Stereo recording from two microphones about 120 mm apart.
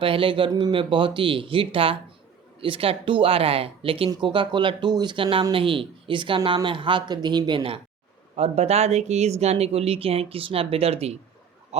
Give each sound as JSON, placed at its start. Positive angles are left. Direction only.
{"t": 0.0, "sound": "speech", "side_deg": -45}
{"t": 8.4, "sound": "speech", "side_deg": -60}
{"t": 11.7, "sound": "a sound", "side_deg": -65}